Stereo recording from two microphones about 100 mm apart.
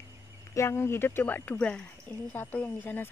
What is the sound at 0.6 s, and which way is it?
Speech, 25° left (ahead or behind).